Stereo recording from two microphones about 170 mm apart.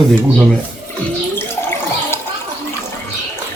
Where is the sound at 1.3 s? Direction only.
15° left (ahead or behind).